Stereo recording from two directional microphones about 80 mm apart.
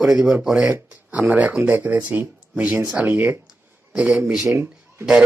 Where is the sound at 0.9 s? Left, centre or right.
Centre.